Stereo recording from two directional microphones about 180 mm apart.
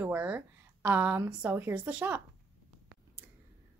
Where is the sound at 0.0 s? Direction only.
10° right (ahead or behind).